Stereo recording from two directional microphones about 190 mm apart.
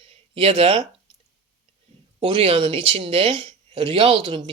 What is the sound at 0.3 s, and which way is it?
Speech, 30° right (ahead or behind).